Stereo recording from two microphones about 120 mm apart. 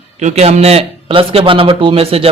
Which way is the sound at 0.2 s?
70° right (ahead or behind).